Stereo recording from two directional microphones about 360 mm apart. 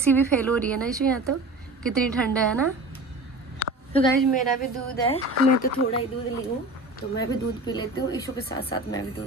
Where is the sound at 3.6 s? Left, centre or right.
Right.